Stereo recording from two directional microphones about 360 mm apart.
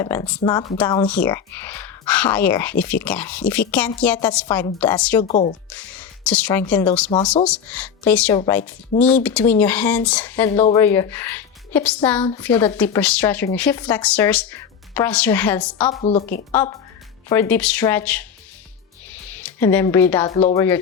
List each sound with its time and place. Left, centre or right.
0.0 s a woman's voice: centre
5.3 s speech: centre
5.7 s speech: centre
15.9 s a woman's voice: centre
16.5 s speech: centre
19.3 s a woman's voice: centre